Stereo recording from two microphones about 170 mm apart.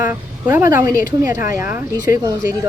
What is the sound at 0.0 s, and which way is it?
A woman's voice, 10° right (ahead or behind).